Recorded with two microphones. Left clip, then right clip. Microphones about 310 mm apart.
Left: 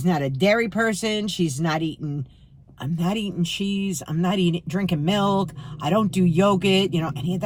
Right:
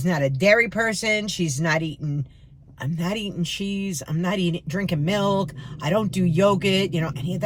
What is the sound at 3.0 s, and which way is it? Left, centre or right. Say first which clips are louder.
Speech: left 1 dB; centre.